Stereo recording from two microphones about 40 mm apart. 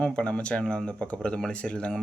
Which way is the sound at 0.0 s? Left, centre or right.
Left.